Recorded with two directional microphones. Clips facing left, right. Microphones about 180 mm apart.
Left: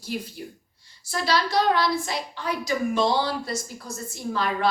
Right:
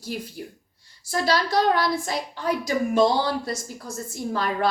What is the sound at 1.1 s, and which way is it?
A woman's voice, 45° right (ahead or behind).